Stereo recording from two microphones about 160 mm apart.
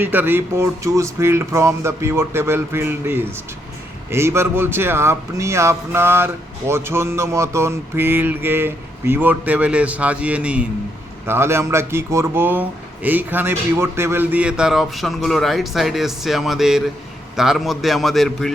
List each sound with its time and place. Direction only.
0.0 s a man's voice: 10° right (ahead or behind)